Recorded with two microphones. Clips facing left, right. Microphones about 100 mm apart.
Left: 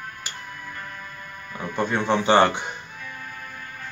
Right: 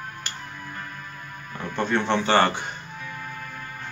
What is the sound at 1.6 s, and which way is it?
Speech, 10° left (ahead or behind).